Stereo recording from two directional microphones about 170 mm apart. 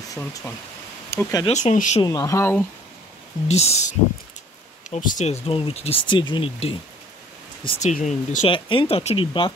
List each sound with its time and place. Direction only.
1.1 s speech: 15° left (ahead or behind)
1.5 s speech: 45° left (ahead or behind)
2.0 s speech: 20° left (ahead or behind)
3.4 s speech: 40° left (ahead or behind)
7.9 s speech: 45° left (ahead or behind)
8.5 s speech: 30° left (ahead or behind)